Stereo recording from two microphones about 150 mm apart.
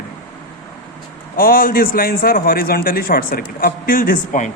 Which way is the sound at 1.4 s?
70° left (ahead or behind).